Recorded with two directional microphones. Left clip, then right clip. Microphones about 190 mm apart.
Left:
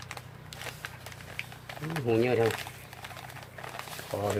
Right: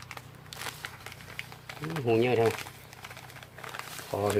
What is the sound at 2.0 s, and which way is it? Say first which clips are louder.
Speech: right 1 dB; 35° right (ahead or behind).